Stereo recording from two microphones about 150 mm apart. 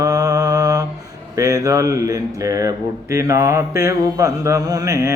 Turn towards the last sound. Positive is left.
turn(degrees=-20)  # may be behind; listen again after turning